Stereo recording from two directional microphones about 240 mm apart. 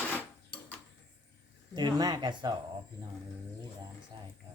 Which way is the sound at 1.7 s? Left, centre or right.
Centre.